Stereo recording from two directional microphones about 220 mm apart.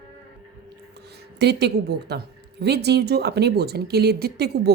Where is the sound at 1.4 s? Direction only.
50° right (ahead or behind).